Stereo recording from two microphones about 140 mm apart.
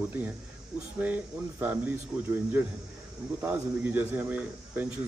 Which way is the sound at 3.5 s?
10° right (ahead or behind).